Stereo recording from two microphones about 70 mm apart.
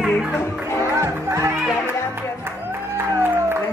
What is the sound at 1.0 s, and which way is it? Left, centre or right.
Music, right.